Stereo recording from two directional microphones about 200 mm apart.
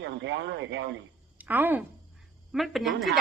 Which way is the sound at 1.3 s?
10° right (ahead or behind).